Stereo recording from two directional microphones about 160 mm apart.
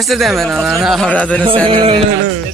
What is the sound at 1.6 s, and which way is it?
Speech, 35° right (ahead or behind).